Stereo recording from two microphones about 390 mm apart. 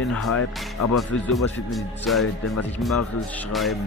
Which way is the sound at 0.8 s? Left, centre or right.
Left.